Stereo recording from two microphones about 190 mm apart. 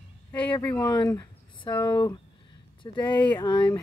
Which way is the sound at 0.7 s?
25° left (ahead or behind).